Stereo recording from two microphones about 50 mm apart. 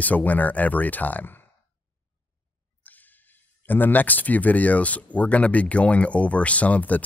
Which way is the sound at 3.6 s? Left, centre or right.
Left.